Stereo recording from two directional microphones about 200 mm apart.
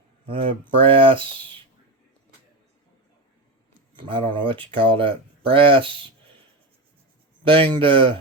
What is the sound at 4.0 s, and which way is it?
Speech, 25° right (ahead or behind).